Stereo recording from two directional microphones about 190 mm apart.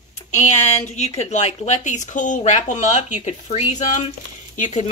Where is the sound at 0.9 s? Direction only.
35° left (ahead or behind).